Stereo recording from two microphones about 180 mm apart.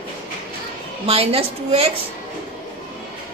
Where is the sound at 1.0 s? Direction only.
35° right (ahead or behind).